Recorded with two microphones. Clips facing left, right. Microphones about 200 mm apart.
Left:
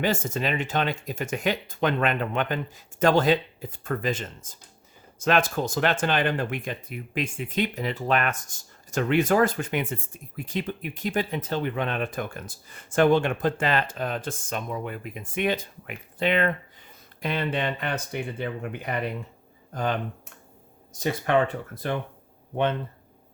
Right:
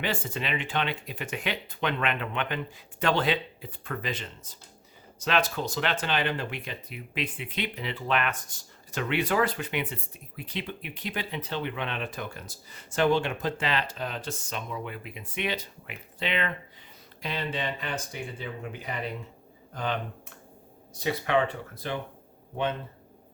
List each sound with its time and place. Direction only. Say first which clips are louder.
0.0 s speech: left 6 dB; 45° left (ahead or behind); by 18.9 s 60° left (ahead or behind)
19.7 s speech: left 4 dB; 45° left (ahead or behind)